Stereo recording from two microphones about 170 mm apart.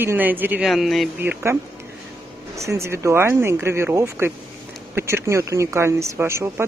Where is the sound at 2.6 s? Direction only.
15° right (ahead or behind).